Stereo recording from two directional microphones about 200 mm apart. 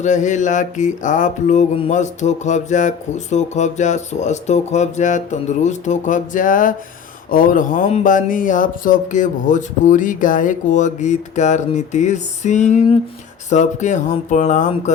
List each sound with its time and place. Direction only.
0.0 s mantra: 35° left (ahead or behind)